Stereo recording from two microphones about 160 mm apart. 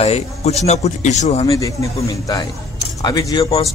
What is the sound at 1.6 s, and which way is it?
Speech, 20° left (ahead or behind).